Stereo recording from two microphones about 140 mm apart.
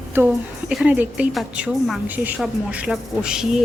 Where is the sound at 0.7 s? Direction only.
10° right (ahead or behind).